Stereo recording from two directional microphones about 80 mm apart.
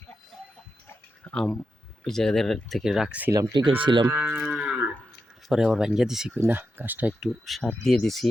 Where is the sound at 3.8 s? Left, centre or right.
Right.